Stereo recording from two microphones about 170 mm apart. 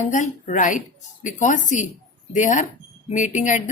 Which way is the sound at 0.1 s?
45° left (ahead or behind).